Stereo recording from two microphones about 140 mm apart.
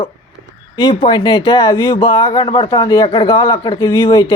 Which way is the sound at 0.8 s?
35° left (ahead or behind).